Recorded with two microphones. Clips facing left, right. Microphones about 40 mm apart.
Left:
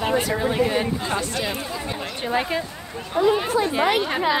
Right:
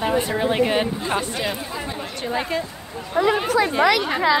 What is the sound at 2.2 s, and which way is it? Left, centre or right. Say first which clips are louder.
Speech: left 1 dB; centre.